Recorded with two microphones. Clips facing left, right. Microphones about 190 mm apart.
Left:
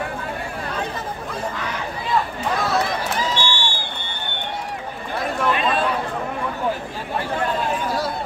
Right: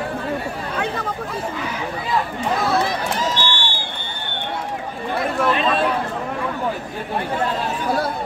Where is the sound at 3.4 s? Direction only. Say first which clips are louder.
Even; 15° left (ahead or behind).